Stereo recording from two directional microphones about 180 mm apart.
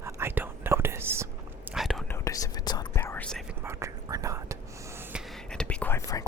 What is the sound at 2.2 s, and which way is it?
Whispering, 20° left (ahead or behind).